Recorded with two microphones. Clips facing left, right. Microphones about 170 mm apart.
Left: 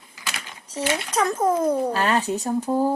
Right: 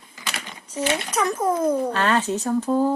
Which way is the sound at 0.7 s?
30° left (ahead or behind).